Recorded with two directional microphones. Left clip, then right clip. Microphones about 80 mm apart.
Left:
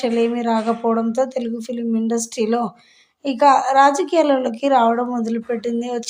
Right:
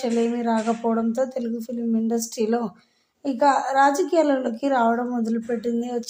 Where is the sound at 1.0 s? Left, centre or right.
Left.